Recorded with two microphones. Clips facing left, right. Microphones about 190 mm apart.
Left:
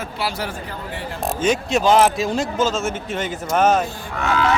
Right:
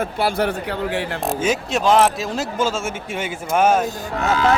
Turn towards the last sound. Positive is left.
turn(degrees=-35)  # may be behind; listen again after turning